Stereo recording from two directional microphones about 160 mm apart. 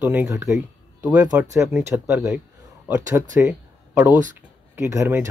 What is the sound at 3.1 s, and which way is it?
Speech, 15° right (ahead or behind).